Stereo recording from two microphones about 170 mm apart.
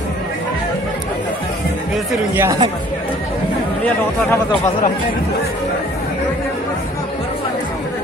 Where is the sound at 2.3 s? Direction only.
20° right (ahead or behind).